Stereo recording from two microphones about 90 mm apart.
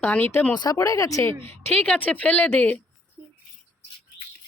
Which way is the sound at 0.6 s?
40° left (ahead or behind).